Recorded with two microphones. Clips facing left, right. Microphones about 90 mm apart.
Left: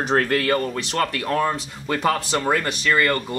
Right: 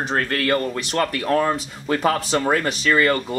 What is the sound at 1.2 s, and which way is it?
Speech, 5° right (ahead or behind).